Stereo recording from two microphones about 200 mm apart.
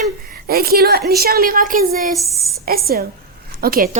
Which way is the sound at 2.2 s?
Centre (ahead or behind).